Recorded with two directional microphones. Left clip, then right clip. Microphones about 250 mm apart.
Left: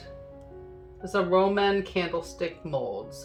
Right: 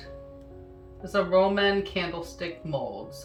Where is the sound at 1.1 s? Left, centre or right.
Left.